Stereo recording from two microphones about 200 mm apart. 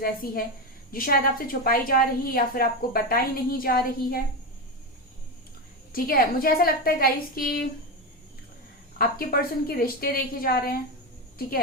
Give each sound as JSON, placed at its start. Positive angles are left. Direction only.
{"t": 0.0, "sound": "a woman's voice", "side_deg": 50}
{"t": 5.9, "sound": "a woman's voice", "side_deg": 45}
{"t": 9.0, "sound": "a woman's voice", "side_deg": 45}